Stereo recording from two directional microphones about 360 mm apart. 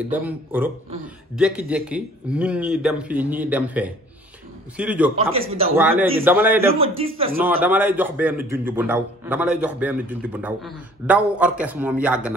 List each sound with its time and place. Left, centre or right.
0.1 s a man's voice: centre
5.3 s speech: centre
5.8 s a man's voice: centre
7.2 s speech: centre
7.6 s a man's voice: centre